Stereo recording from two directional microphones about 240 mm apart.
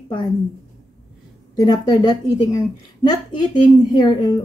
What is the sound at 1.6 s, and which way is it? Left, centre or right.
A woman's voice, centre.